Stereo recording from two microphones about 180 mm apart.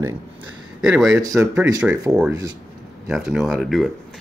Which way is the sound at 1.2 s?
20° right (ahead or behind).